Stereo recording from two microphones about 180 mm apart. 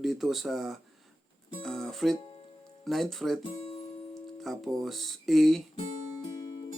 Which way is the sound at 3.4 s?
35° left (ahead or behind).